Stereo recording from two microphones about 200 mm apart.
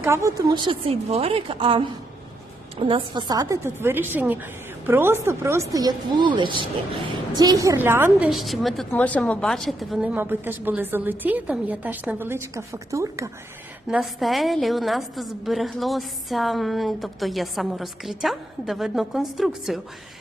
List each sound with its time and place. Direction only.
0.0 s a woman's voice: 15° right (ahead or behind)
13.8 s a woman's voice: centre (ahead or behind)